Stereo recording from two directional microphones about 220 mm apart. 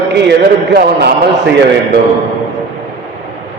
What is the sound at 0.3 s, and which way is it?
A man's voice, 50° right (ahead or behind).